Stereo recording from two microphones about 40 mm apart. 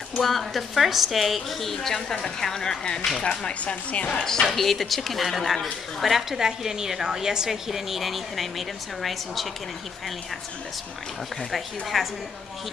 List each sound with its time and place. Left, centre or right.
0.1 s a woman's voice: centre
1.7 s a woman's voice: centre
3.2 s speech: left
4.2 s a woman's voice: centre
4.5 s a woman's voice: centre
11.5 s a woman's voice: centre